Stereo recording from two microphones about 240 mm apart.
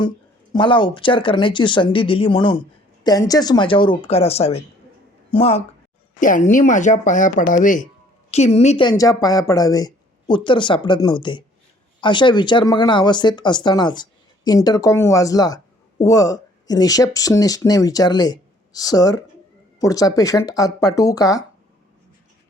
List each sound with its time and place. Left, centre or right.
0.5 s a woman's voice: centre